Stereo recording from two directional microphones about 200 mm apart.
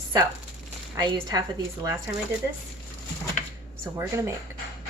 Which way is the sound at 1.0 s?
20° right (ahead or behind).